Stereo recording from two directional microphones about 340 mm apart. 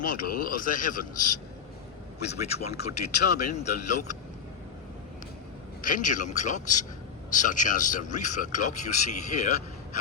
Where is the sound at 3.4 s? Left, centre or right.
Left.